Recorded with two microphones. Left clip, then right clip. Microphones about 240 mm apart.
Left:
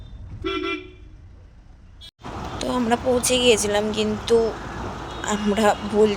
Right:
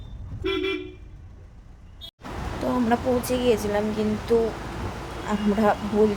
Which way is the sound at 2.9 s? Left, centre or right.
Left.